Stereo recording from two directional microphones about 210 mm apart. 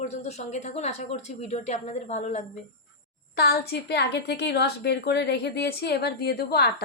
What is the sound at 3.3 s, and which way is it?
A woman's voice, 50° left (ahead or behind).